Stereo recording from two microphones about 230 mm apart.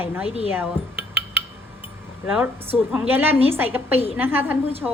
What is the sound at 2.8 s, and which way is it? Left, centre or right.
A woman's voice, centre.